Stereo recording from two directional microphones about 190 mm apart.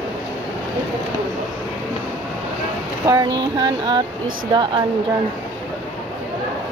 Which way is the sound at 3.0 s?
20° right (ahead or behind).